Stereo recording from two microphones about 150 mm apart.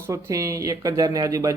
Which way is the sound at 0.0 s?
20° right (ahead or behind).